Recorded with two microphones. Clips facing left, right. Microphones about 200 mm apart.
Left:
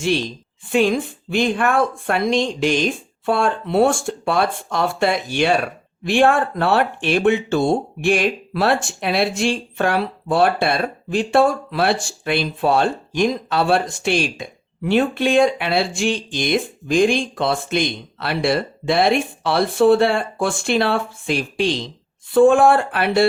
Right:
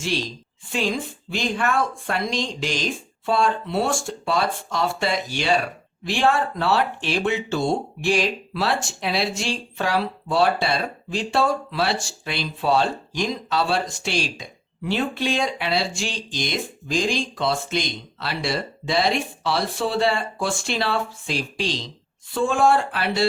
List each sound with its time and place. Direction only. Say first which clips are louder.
0.6 s speech: left 8 dB; 55° left (ahead or behind)